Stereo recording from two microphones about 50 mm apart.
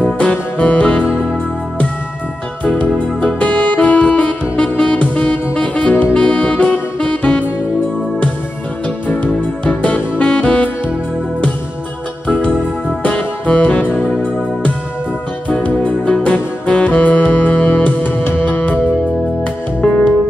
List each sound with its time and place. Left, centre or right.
0.0 s music: left
3.3 s music: left
5.6 s saxophone: left
6.1 s music: left
9.0 s music: left
13.0 s music: left
16.3 s music: left
19.8 s music: centre